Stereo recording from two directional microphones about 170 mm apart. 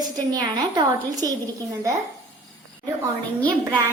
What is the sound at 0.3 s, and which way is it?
A woman's voice, 20° right (ahead or behind).